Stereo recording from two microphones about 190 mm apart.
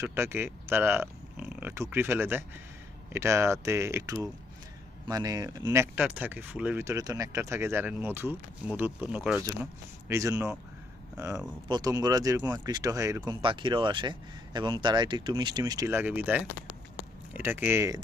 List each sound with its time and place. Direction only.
0.0 s speech: 10° right (ahead or behind)
13.4 s speech: 25° right (ahead or behind)